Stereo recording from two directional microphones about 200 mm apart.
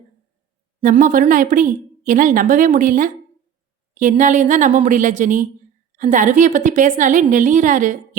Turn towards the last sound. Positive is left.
turn(degrees=-40)  # may be behind; listen again after turning